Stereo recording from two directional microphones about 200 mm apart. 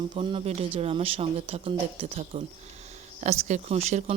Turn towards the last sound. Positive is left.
turn(degrees=-35)  # may be behind; listen again after turning